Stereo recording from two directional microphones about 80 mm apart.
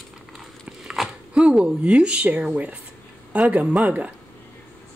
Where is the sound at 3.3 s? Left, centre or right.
Centre.